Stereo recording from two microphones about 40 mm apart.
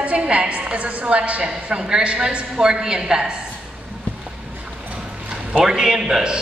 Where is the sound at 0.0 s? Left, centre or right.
Right.